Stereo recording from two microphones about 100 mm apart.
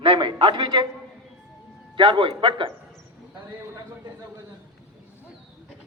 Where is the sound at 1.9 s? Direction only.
55° right (ahead or behind).